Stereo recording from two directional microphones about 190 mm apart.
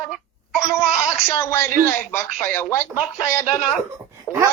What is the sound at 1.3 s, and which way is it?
Speech, 15° left (ahead or behind).